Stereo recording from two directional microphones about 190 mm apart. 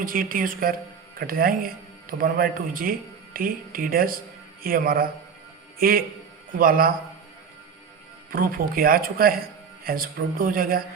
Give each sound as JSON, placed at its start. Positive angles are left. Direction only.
{"t": 0.0, "sound": "speech", "side_deg": -50}
{"t": 8.3, "sound": "speech", "side_deg": -50}